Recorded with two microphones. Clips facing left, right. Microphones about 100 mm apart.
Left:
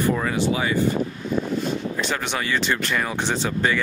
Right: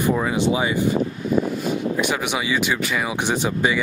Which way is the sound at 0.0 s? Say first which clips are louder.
Right 2 dB; 15° right (ahead or behind).